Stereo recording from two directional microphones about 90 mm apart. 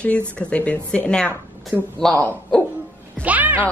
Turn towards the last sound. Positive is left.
turn(degrees=-20)  # may be behind; listen again after turning